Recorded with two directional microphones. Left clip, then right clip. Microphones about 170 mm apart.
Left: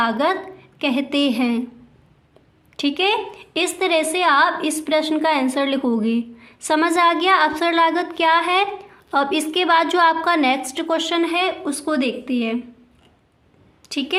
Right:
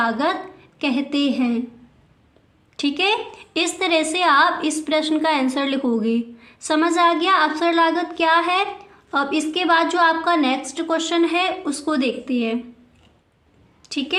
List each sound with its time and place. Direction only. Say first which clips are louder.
0.0 s a woman's voice: left 1 dB; 20° left (ahead or behind)
2.7 s a woman's voice: left 1 dB; 15° left (ahead or behind)
13.8 s a woman's voice: left 1 dB; 15° left (ahead or behind)